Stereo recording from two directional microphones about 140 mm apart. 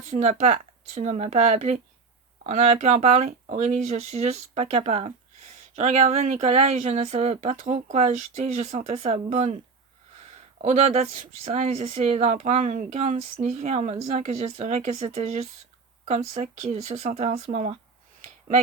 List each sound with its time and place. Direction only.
0.1 s speech: 50° right (ahead or behind)
10.6 s speech: 55° right (ahead or behind)
18.2 s a sound: 50° right (ahead or behind)